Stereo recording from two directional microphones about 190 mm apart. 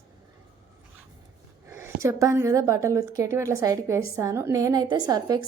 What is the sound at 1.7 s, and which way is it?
A woman's voice, 15° right (ahead or behind).